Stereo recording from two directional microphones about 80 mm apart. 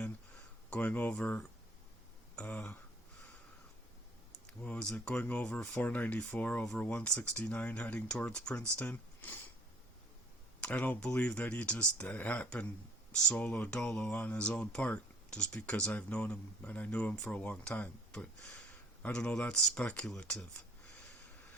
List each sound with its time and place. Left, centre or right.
0.7 s speech: centre
4.4 s speech: centre
10.6 s speech: centre